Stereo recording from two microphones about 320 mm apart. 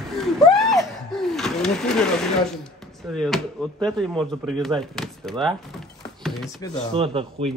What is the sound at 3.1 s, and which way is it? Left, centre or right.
Speech, centre.